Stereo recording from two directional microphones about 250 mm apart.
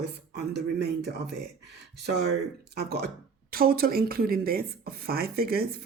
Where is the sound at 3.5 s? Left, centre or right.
Right.